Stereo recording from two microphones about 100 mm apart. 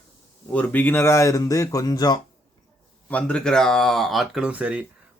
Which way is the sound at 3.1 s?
10° left (ahead or behind).